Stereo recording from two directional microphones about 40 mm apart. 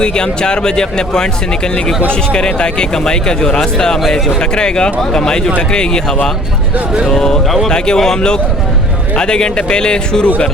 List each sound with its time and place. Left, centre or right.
0.0 s a man's voice: left
7.4 s speech: centre
7.9 s a man's voice: centre